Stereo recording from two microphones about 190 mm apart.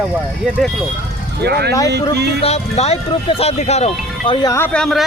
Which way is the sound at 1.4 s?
60° right (ahead or behind).